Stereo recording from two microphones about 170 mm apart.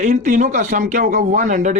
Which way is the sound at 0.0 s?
45° right (ahead or behind).